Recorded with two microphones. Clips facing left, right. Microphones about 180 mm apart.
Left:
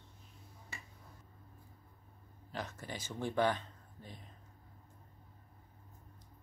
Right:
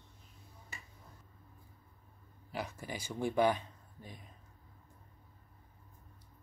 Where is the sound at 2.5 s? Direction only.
10° right (ahead or behind).